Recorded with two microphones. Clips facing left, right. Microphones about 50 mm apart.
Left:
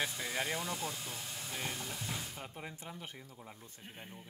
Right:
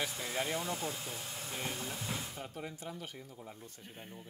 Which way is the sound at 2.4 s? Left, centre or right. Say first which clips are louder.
Right 2 dB; centre.